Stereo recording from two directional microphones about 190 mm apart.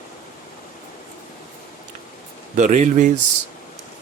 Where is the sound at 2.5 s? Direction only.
40° right (ahead or behind).